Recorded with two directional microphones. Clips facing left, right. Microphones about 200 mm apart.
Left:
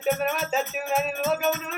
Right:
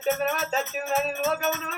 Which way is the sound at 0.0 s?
5° left (ahead or behind).